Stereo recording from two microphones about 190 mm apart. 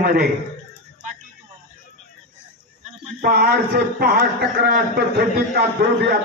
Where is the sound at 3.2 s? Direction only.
50° right (ahead or behind).